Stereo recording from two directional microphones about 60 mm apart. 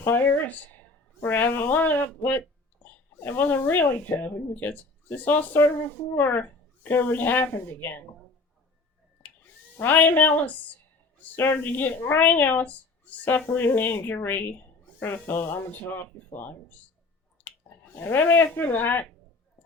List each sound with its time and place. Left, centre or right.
0.0 s a woman's voice: left
2.8 s a sound: left
3.2 s a woman's voice: left
9.7 s a woman's voice: left
17.9 s a woman's voice: left